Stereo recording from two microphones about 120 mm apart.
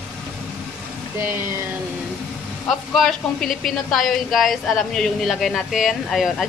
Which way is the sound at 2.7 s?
Centre (ahead or behind).